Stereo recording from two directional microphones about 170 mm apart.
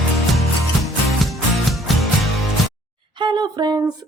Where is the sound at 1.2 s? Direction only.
Centre (ahead or behind).